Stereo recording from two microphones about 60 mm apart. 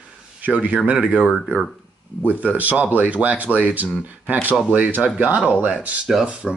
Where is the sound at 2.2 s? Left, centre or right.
Right.